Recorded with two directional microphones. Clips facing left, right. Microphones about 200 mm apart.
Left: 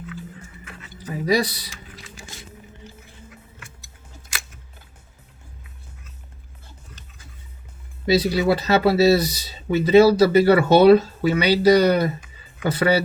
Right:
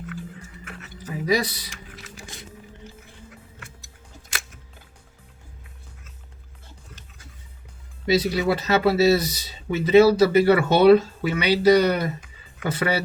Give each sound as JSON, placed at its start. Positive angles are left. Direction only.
{"t": 1.1, "sound": "speech", "side_deg": 35}
{"t": 8.0, "sound": "speech", "side_deg": 35}